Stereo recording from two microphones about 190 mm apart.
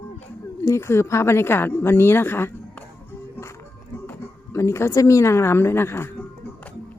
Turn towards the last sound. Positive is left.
turn(degrees=10)  # may be behind; listen again after turning